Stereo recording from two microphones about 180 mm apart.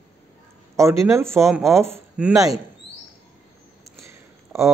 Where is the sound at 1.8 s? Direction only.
15° right (ahead or behind).